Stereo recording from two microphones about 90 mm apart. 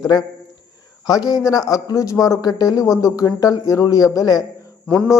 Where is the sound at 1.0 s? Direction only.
45° left (ahead or behind).